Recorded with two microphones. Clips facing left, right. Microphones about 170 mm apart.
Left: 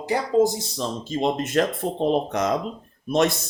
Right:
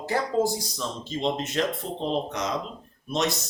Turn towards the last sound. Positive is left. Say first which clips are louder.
# left 6 dB
turn(degrees=55)  # may be behind; listen again after turning